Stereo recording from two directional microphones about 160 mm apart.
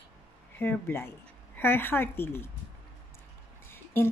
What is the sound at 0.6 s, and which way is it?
Speech, 15° left (ahead or behind).